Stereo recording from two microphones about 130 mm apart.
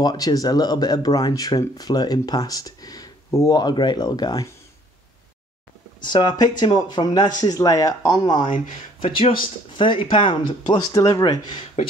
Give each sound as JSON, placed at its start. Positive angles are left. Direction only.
{"t": 0.0, "sound": "speech", "side_deg": 30}
{"t": 5.9, "sound": "speech", "side_deg": 35}
{"t": 9.0, "sound": "speech", "side_deg": 45}